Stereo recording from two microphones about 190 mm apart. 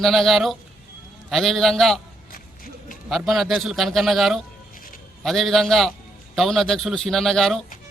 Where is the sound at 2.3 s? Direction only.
45° left (ahead or behind).